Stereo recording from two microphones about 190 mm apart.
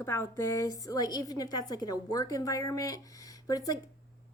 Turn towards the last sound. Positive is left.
turn(degrees=20)  # may be behind; listen again after turning